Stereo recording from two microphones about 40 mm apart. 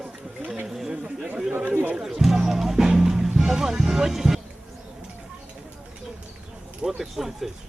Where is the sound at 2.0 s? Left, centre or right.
Centre.